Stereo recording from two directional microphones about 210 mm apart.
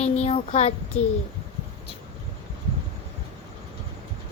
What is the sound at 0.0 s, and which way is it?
Child singing, 30° left (ahead or behind).